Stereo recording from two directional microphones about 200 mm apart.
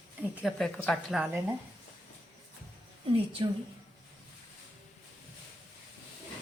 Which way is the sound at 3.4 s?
25° right (ahead or behind).